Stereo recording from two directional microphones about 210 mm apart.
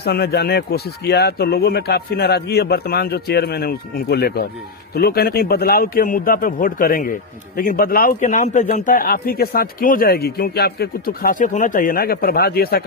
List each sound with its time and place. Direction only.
0.0 s a man's voice: 50° left (ahead or behind)